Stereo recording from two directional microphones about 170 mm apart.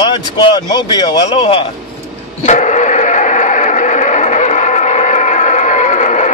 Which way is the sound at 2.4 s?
45° left (ahead or behind).